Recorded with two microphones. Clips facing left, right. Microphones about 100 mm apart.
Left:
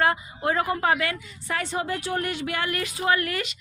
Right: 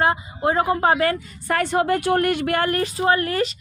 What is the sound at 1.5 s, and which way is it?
Speech, 55° right (ahead or behind).